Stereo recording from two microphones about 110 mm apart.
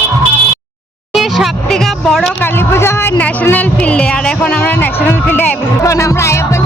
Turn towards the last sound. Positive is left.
turn(degrees=25)  # may be behind; listen again after turning